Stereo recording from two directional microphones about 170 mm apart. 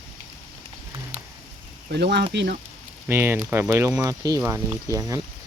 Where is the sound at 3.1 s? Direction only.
15° right (ahead or behind).